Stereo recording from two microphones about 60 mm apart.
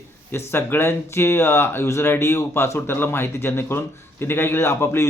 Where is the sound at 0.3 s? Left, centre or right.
Left.